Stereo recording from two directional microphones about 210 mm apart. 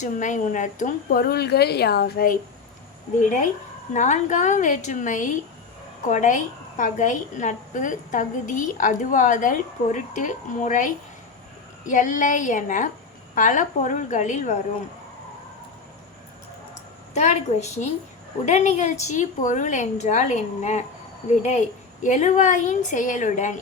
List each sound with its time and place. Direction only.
0.0 s a woman's voice: 35° left (ahead or behind)
11.9 s a woman's voice: 40° left (ahead or behind)
17.2 s a woman's voice: 35° left (ahead or behind)
22.0 s a woman's voice: 35° left (ahead or behind)